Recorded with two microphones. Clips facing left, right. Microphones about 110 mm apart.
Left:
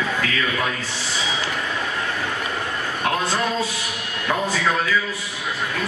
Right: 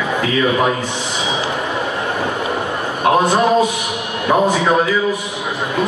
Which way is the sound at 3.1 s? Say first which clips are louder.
Right 10 dB; 20° right (ahead or behind).